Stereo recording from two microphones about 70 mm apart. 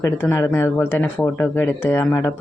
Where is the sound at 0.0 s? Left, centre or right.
Left.